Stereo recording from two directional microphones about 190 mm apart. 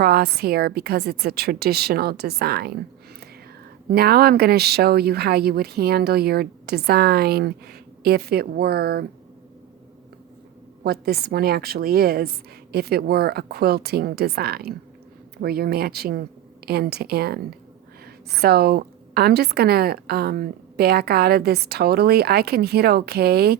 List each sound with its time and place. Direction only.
0.0 s a woman's voice: 55° right (ahead or behind)
3.8 s a woman's voice: 55° right (ahead or behind)
10.8 s a woman's voice: 55° right (ahead or behind)